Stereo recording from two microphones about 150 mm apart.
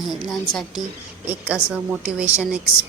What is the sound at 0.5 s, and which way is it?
Speech, 30° left (ahead or behind).